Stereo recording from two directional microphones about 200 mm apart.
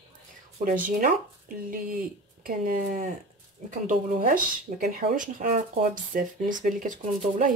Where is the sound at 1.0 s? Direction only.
45° right (ahead or behind).